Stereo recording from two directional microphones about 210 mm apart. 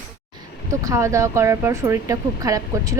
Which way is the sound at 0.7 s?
15° right (ahead or behind).